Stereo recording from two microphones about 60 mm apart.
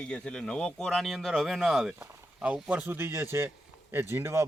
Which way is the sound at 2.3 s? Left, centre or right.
Right.